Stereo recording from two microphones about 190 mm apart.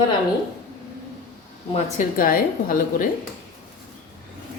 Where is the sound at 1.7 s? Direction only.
45° left (ahead or behind).